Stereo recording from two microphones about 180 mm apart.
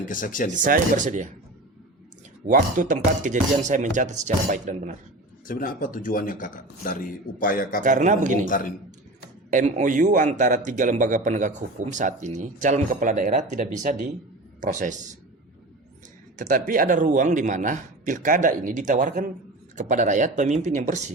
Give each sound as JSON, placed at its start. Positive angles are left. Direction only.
{"t": 0.1, "sound": "speech", "side_deg": 50}
{"t": 0.6, "sound": "a man's voice", "side_deg": -45}
{"t": 2.5, "sound": "a man's voice", "side_deg": -45}
{"t": 5.5, "sound": "speech", "side_deg": 50}
{"t": 7.9, "sound": "a man's voice", "side_deg": -45}
{"t": 8.4, "sound": "speech", "side_deg": 50}
{"t": 9.5, "sound": "a man's voice", "side_deg": -45}
{"t": 16.4, "sound": "a man's voice", "side_deg": -45}